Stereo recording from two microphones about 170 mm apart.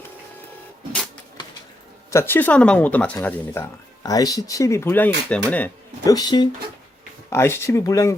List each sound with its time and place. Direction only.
2.0 s speech: 15° left (ahead or behind)
6.1 s speech: 20° left (ahead or behind)